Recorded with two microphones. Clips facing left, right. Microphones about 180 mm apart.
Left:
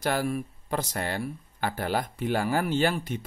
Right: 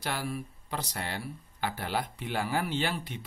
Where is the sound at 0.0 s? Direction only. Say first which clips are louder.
Left 7 dB; 45° left (ahead or behind).